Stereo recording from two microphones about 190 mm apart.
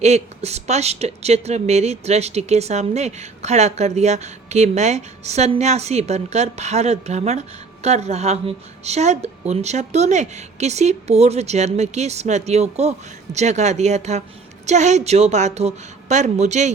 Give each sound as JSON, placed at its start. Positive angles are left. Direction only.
{"t": 0.0, "sound": "speech", "side_deg": -35}